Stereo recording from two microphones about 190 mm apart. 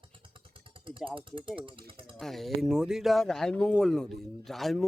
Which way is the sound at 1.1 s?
25° right (ahead or behind).